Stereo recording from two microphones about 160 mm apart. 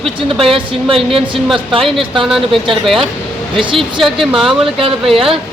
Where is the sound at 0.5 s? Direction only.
35° right (ahead or behind).